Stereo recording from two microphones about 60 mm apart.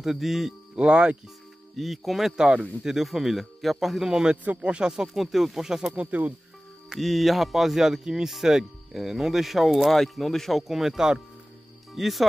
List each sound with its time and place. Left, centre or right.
0.0 s speech: centre
0.7 s speech: centre
1.8 s speech: centre
5.9 s speech: right
6.9 s speech: centre